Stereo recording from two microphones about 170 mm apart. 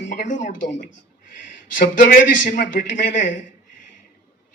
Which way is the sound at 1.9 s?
55° left (ahead or behind).